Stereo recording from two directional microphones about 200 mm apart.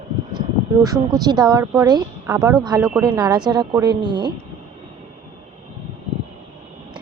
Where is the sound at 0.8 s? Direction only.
20° right (ahead or behind).